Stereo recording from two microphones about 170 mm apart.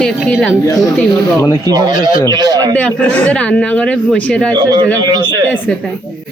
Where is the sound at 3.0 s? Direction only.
5° left (ahead or behind).